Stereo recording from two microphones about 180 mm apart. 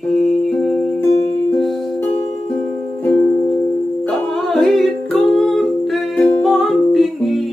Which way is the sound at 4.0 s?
Centre (ahead or behind).